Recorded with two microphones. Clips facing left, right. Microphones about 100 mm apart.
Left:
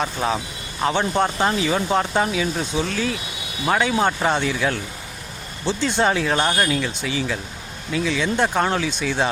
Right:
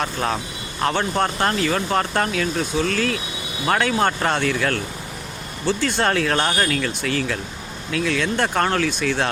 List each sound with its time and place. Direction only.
0.0 s speech: 5° left (ahead or behind)